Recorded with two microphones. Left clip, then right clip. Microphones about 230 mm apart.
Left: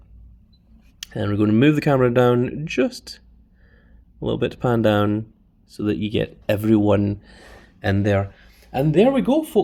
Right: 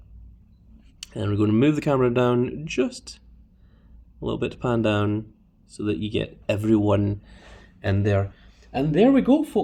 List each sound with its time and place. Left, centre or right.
0.9 s speech: left